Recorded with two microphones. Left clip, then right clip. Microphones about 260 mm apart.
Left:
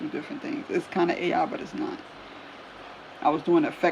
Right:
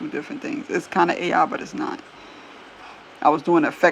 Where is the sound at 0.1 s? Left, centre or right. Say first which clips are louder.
Right 4 dB; centre.